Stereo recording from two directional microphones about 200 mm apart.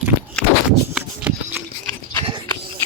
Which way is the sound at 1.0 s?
10° right (ahead or behind).